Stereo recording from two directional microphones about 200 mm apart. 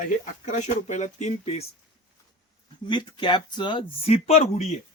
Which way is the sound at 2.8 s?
25° left (ahead or behind).